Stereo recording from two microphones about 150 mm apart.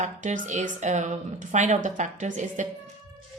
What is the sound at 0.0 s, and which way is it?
A woman's voice, 55° right (ahead or behind).